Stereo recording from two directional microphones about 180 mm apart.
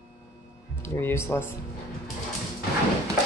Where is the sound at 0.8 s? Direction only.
10° left (ahead or behind).